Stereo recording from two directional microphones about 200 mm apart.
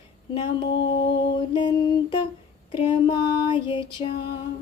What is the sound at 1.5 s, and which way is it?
Child singing, 25° left (ahead or behind).